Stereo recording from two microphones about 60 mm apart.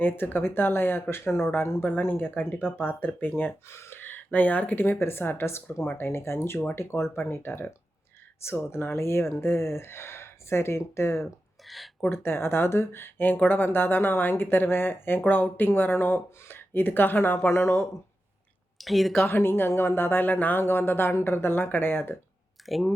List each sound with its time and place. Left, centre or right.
0.0 s speech: left
3.7 s speech: left
11.7 s speech: centre
12.1 s speech: left
18.8 s a woman's voice: centre
19.1 s speech: left
22.6 s speech: centre